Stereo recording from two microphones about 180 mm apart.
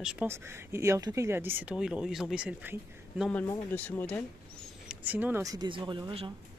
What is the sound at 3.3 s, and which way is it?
Speech, 10° left (ahead or behind).